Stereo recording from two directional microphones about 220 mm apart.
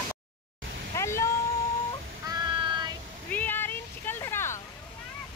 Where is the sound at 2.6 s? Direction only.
20° right (ahead or behind).